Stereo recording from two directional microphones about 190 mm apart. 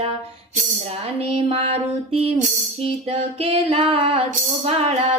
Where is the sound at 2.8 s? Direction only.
30° right (ahead or behind).